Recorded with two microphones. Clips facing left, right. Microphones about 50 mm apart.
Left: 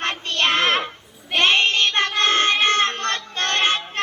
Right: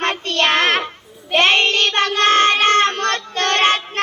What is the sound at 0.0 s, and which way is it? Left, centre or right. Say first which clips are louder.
Child singing: right 4 dB; right.